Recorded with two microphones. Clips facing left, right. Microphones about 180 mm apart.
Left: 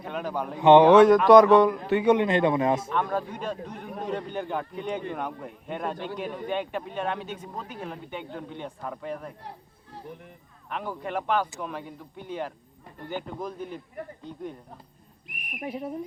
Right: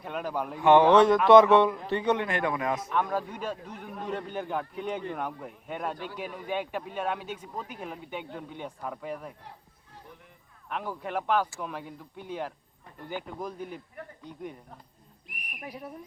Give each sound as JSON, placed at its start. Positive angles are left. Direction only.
{"t": 0.0, "sound": "speech", "side_deg": 0}
{"t": 0.6, "sound": "speech", "side_deg": 20}
{"t": 2.0, "sound": "a man's voice", "side_deg": 10}
{"t": 2.2, "sound": "speech", "side_deg": 20}
{"t": 2.9, "sound": "speech", "side_deg": -5}
{"t": 10.7, "sound": "speech", "side_deg": 0}
{"t": 15.3, "sound": "speech", "side_deg": 20}